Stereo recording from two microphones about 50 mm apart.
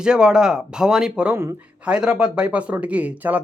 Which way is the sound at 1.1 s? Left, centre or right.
Right.